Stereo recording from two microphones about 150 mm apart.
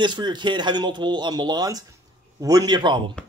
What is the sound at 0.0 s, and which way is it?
A man's voice, 30° right (ahead or behind).